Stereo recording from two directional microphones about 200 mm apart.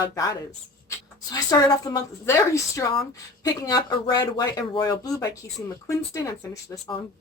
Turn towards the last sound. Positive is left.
turn(degrees=15)  # may be behind; listen again after turning